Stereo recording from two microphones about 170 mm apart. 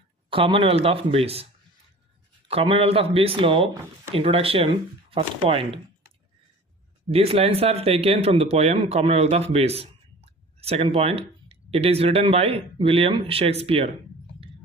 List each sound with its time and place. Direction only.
0.3 s speech: 30° right (ahead or behind)
2.5 s speech: 35° right (ahead or behind)
7.1 s speech: 35° right (ahead or behind)